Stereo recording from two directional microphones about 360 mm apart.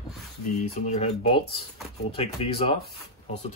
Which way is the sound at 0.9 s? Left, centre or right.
Centre.